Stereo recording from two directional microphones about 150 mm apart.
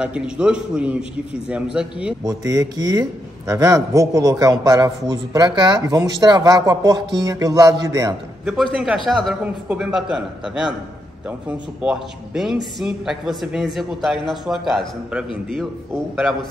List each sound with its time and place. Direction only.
0.0 s a man's voice: 5° right (ahead or behind)
2.2 s a man's voice: 20° right (ahead or behind)
8.7 s speech: 5° right (ahead or behind)